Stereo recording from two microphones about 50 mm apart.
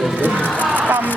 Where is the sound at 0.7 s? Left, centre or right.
Right.